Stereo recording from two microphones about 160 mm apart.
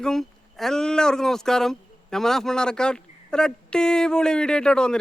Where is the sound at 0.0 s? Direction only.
Centre (ahead or behind).